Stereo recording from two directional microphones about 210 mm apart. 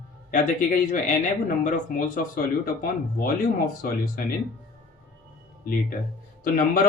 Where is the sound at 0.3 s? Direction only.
40° left (ahead or behind).